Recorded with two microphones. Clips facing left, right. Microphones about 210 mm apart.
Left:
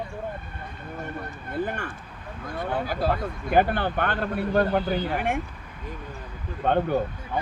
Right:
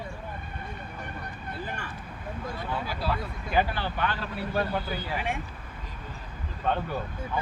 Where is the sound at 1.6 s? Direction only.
50° left (ahead or behind).